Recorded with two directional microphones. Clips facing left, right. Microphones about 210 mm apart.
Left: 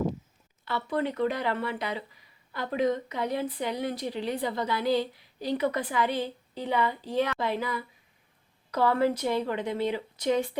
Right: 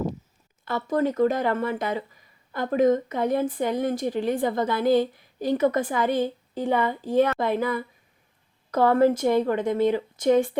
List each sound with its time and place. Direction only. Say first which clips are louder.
0.6 s speech: right 5 dB; 45° right (ahead or behind)